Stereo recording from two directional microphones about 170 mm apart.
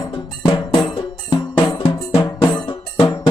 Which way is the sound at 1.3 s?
25° left (ahead or behind).